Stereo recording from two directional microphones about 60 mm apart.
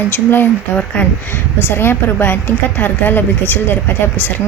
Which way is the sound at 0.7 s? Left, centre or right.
Left.